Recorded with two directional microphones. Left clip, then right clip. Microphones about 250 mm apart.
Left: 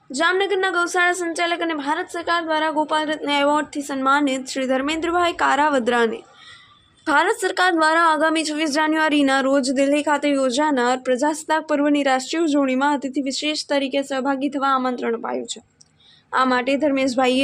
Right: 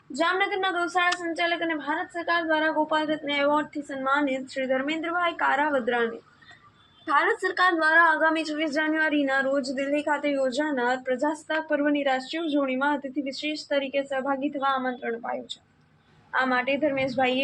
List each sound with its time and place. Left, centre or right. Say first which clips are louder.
0.2 s a woman's voice: left 5 dB; left